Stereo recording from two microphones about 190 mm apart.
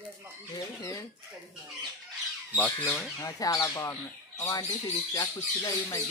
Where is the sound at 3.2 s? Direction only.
20° left (ahead or behind).